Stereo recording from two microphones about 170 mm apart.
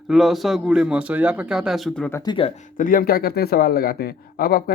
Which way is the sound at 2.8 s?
55° left (ahead or behind).